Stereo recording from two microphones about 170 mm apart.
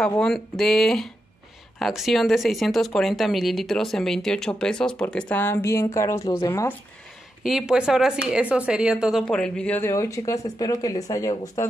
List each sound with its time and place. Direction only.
0.2 s speech: centre (ahead or behind)
7.4 s speech: 5° right (ahead or behind); by 11.6 s 20° left (ahead or behind)